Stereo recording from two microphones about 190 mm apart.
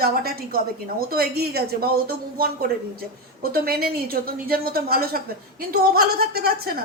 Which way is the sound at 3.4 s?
50° right (ahead or behind).